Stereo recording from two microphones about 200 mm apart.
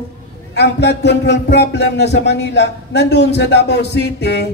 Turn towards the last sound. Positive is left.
turn(degrees=55)  # may be behind; listen again after turning